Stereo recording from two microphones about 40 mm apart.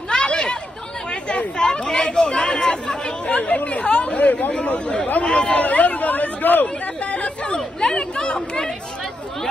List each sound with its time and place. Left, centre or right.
0.1 s chatter: left
1.6 s speech: centre
3.3 s speech: left
4.5 s speech: left
5.6 s speech: left
7.1 s speech: left